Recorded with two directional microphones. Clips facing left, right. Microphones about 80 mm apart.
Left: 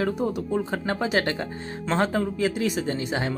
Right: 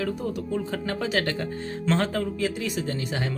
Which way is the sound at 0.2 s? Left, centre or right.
Left.